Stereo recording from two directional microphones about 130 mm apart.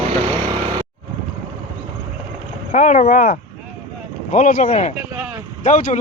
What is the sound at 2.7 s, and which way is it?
Speech, 70° left (ahead or behind).